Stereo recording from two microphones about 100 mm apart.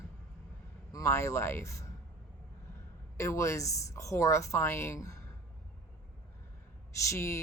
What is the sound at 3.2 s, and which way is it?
Speech, 30° left (ahead or behind).